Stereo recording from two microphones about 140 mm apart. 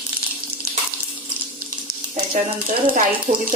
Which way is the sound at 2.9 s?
75° right (ahead or behind).